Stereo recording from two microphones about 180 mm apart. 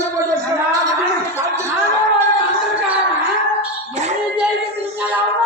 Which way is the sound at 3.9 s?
40° right (ahead or behind).